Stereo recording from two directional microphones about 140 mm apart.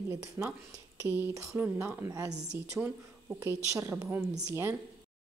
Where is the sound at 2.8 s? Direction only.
10° right (ahead or behind).